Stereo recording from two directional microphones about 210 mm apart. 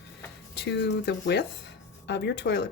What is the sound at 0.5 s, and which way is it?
Speech, 55° left (ahead or behind).